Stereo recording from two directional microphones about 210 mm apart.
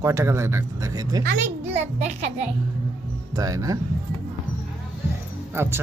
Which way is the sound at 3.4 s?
15° right (ahead or behind).